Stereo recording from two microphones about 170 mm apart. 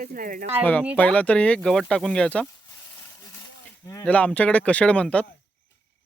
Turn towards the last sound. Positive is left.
turn(degrees=5)  # may be behind; listen again after turning